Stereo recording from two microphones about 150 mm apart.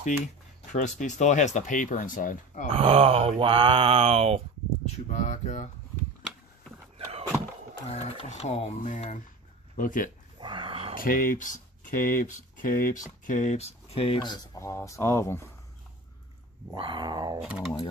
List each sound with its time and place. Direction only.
0.7 s speech: 55° left (ahead or behind)
2.7 s speech: 40° right (ahead or behind)
4.8 s speech: 50° left (ahead or behind)
7.9 s speech: 45° left (ahead or behind); by 10.1 s 60° left (ahead or behind)
10.4 s a sound: 35° right (ahead or behind)
11.0 s speech: 70° left (ahead or behind)
13.2 s speech: 55° left (ahead or behind); by 15.4 s 20° left (ahead or behind)
16.7 s dog: 30° right (ahead or behind)
17.4 s speech: 5° right (ahead or behind)